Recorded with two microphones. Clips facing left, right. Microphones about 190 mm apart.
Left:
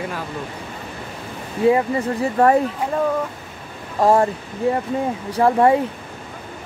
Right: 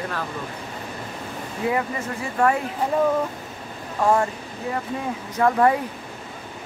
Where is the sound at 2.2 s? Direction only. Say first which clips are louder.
Left 5 dB; 35° left (ahead or behind).